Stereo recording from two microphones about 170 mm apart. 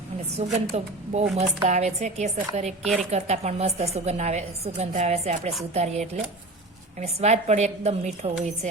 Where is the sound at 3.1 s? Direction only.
40° right (ahead or behind).